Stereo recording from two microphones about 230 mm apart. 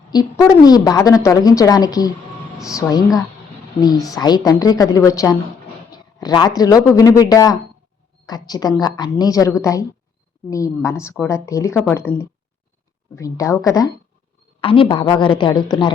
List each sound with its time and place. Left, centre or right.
0.1 s a woman's voice: centre